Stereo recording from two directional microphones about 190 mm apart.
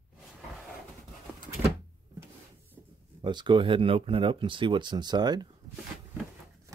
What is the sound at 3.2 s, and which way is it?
Speech, 25° right (ahead or behind).